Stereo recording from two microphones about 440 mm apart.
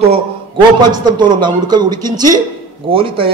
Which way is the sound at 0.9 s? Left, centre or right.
Centre.